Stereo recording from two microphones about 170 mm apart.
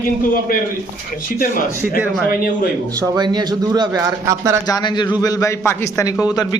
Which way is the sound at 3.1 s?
25° right (ahead or behind).